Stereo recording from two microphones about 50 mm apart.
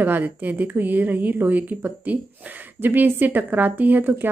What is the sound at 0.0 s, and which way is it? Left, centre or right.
Speech, right.